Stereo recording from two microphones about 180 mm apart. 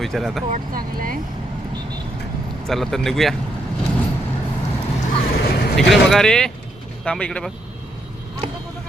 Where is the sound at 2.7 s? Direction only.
Centre (ahead or behind).